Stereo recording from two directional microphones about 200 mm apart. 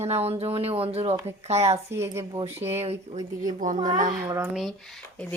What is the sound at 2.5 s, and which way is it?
Speech, 10° right (ahead or behind).